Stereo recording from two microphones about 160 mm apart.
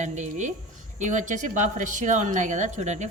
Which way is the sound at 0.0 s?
50° right (ahead or behind).